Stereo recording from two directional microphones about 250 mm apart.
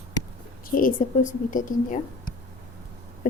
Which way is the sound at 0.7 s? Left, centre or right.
Left.